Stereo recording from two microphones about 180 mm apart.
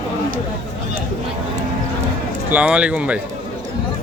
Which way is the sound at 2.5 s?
5° right (ahead or behind).